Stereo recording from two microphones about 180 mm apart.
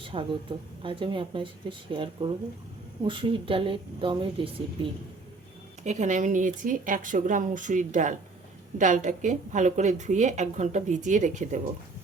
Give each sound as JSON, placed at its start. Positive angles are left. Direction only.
{"t": 0.0, "sound": "a sound", "side_deg": -30}
{"t": 0.8, "sound": "a woman's voice", "side_deg": -30}
{"t": 5.8, "sound": "a woman's voice", "side_deg": -40}